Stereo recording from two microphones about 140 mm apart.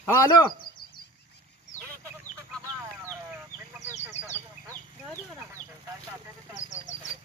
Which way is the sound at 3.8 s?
55° left (ahead or behind).